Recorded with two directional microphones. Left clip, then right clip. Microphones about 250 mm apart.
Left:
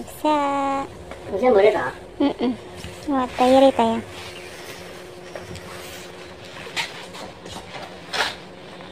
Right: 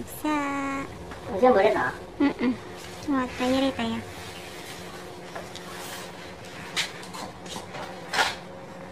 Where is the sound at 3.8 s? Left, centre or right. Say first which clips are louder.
Left 11 dB; centre.